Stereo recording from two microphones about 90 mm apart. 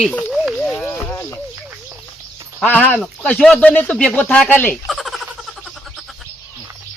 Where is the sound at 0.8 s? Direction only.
20° left (ahead or behind).